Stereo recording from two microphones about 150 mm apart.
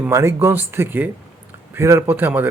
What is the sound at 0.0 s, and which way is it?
Speech, 20° right (ahead or behind).